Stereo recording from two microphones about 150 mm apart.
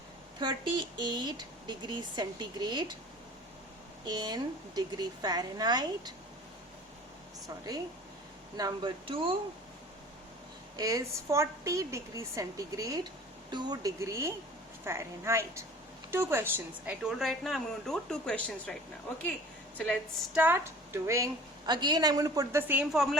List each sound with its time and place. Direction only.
0.3 s speech: 30° right (ahead or behind)
4.0 s speech: 30° right (ahead or behind)
7.4 s speech: 25° right (ahead or behind)
10.8 s a woman's voice: 20° right (ahead or behind); by 18.7 s 10° left (ahead or behind)
19.7 s a woman's voice: 5° left (ahead or behind)
20.3 s a woman's voice: 15° right (ahead or behind)
21.7 s speech: 30° right (ahead or behind)
22.6 s a woman's voice: 10° right (ahead or behind)